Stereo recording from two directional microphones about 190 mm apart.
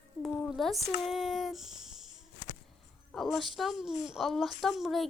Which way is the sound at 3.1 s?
Centre (ahead or behind).